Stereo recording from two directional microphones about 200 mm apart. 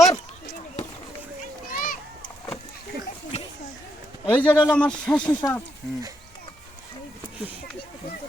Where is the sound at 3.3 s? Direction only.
35° left (ahead or behind).